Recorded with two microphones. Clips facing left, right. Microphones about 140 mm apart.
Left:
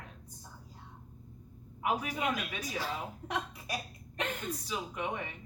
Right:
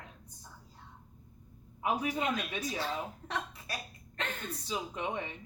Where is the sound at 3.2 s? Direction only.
15° left (ahead or behind).